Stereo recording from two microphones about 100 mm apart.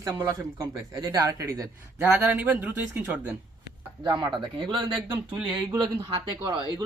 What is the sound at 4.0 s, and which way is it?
A man's voice, 45° right (ahead or behind).